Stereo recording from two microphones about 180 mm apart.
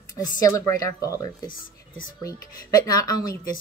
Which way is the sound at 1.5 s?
50° left (ahead or behind).